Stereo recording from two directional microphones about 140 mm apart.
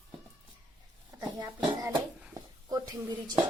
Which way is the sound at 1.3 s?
25° right (ahead or behind).